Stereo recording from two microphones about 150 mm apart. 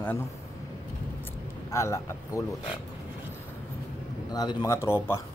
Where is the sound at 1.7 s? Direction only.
20° left (ahead or behind).